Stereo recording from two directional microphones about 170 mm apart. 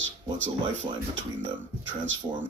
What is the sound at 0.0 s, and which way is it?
Speech, 90° right.